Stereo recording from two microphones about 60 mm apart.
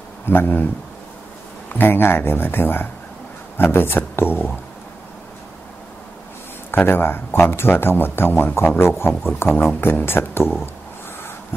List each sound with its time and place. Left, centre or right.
0.3 s speech: left
1.7 s speech: left
6.7 s speech: left